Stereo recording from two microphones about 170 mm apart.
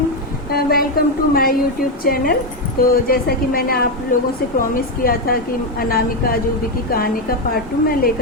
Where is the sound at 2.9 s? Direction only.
60° left (ahead or behind).